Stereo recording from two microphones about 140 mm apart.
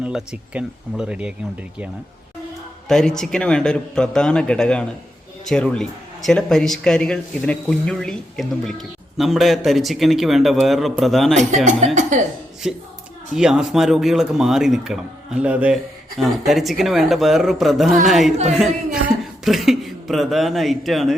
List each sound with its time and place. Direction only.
0.0 s speech: 5° right (ahead or behind)
2.9 s speech: 5° left (ahead or behind)
11.3 s speech: 60° right (ahead or behind)
12.6 s speech: 5° right (ahead or behind)